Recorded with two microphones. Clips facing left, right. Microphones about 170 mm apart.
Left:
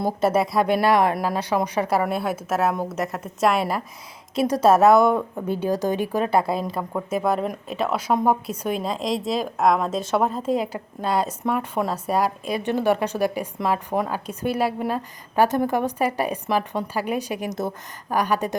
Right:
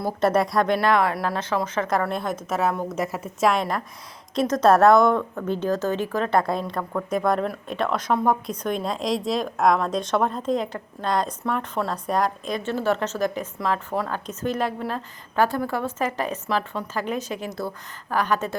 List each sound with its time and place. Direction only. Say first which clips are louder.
0.2 s a woman's voice: right 1 dB; 5° left (ahead or behind)